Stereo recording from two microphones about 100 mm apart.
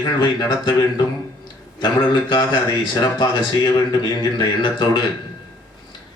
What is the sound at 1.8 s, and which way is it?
Speech, 50° left (ahead or behind).